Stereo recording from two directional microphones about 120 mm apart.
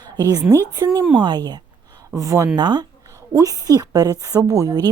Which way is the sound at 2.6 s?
35° right (ahead or behind).